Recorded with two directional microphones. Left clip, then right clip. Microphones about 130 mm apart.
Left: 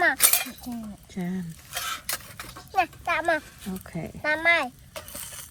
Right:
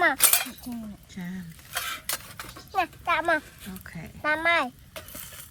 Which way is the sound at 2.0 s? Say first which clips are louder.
Even; 25° right (ahead or behind).